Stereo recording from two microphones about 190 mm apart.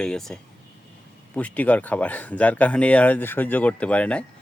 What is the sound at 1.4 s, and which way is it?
Speech, 5° left (ahead or behind).